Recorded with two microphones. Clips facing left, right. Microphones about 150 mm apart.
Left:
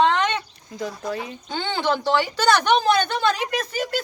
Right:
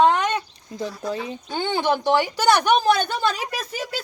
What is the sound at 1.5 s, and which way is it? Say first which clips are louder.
A woman's voice: right 1 dB; 15° right (ahead or behind).